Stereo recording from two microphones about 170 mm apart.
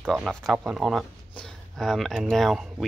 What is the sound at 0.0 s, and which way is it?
Speech, centre (ahead or behind).